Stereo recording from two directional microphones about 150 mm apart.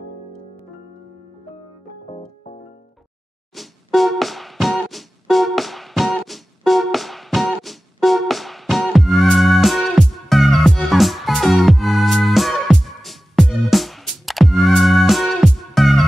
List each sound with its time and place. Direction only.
2.0 s music: 45° left (ahead or behind)
3.5 s music: centre (ahead or behind)